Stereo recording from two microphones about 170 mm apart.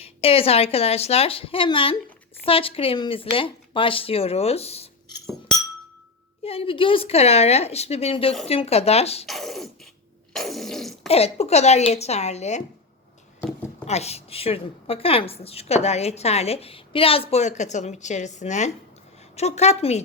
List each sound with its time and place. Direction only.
0.0 s a woman's voice: 35° left (ahead or behind)
6.4 s a woman's voice: 35° left (ahead or behind)
9.2 s speech: centre (ahead or behind)
10.3 s a sound: centre (ahead or behind)
11.1 s a woman's voice: 35° left (ahead or behind)
13.8 s a woman's voice: 40° left (ahead or behind)